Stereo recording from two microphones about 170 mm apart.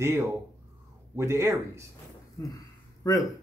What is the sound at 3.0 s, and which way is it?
Speech, 20° left (ahead or behind).